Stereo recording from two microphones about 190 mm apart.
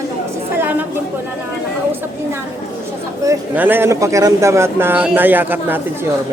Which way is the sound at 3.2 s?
15° right (ahead or behind).